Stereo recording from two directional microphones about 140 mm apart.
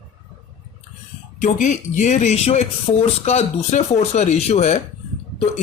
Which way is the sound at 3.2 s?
50° left (ahead or behind).